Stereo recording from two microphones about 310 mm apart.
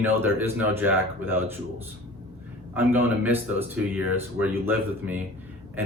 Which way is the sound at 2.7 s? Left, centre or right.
Centre.